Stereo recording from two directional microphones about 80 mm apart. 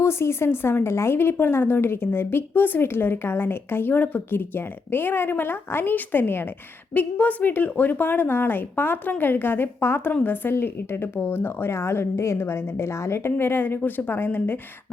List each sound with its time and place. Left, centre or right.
0.0 s a woman's voice: left